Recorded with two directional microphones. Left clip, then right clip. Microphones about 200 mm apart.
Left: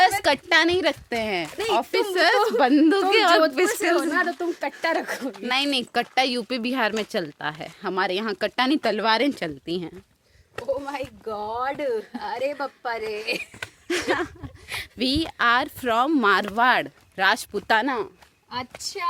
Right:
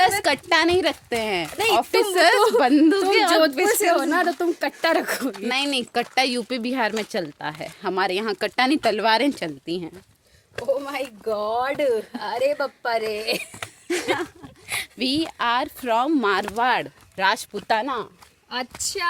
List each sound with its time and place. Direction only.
0.0 s a woman's voice: 10° left (ahead or behind); by 4.0 s 30° left (ahead or behind)
4.0 s speech: 20° right (ahead or behind)
5.5 s speech: 20° left (ahead or behind)
10.7 s speech: 25° right (ahead or behind)
12.1 s a woman's voice: 15° right (ahead or behind)
13.8 s speech: 25° left (ahead or behind)